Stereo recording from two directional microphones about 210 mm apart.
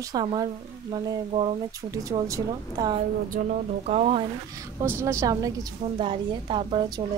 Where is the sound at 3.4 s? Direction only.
40° right (ahead or behind).